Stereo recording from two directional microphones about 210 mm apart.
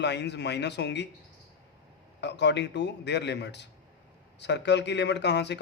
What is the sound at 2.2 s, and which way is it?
Speech, 55° left (ahead or behind).